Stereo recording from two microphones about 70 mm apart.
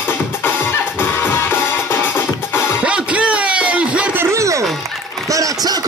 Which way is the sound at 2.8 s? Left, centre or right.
Centre.